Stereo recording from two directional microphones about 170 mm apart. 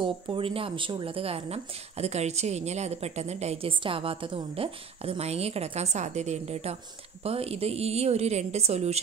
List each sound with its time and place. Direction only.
0.0 s a woman's voice: 30° right (ahead or behind)